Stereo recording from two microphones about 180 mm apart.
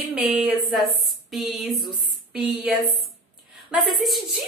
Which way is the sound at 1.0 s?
Centre (ahead or behind).